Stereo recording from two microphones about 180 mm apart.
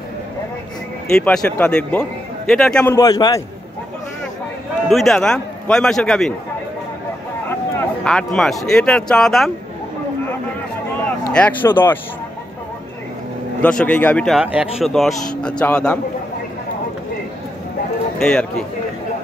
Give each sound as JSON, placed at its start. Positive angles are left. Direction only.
{"t": 1.1, "sound": "speech", "side_deg": 5}
{"t": 3.0, "sound": "a man's voice", "side_deg": 20}
{"t": 4.8, "sound": "speech", "side_deg": 0}
{"t": 8.0, "sound": "speech", "side_deg": 5}
{"t": 11.3, "sound": "speech", "side_deg": 10}
{"t": 13.6, "sound": "speech", "side_deg": 5}
{"t": 18.2, "sound": "speech", "side_deg": 5}